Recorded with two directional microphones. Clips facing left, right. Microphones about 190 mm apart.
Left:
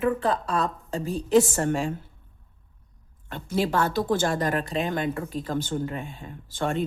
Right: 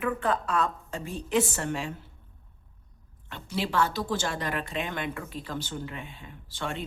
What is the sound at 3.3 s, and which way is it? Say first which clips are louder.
Speech: left 6 dB; 45° left (ahead or behind).